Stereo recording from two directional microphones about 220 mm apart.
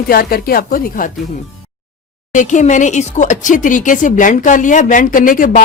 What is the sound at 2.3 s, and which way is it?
Speech, 35° left (ahead or behind).